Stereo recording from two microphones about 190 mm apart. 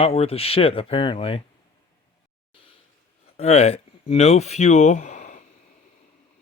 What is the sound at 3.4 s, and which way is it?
Speech, 35° left (ahead or behind).